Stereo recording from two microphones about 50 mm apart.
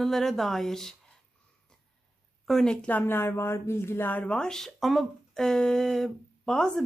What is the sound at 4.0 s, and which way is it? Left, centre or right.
Speech, left.